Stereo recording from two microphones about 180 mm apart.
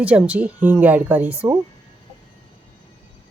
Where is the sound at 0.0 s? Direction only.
5° right (ahead or behind).